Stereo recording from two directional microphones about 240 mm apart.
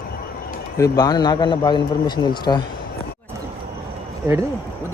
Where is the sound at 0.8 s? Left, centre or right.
Centre.